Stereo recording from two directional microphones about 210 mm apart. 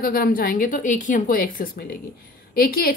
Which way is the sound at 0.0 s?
45° left (ahead or behind).